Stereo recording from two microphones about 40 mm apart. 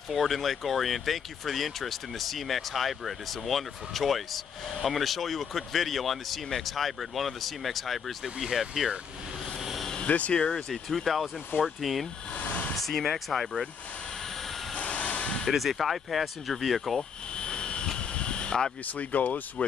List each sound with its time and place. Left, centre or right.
0.1 s speech: centre
9.6 s vehicle: centre
10.0 s speech: left
10.5 s speech: centre
12.4 s a sound: left
12.7 s speech: centre
14.8 s vehicle: left
15.5 s speech: centre
17.4 s vehicle: left
18.9 s speech: left